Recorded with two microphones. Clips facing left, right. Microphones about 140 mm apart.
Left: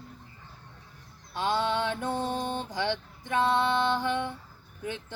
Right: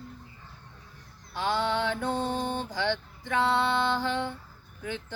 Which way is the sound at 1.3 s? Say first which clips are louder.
Even; 20° left (ahead or behind).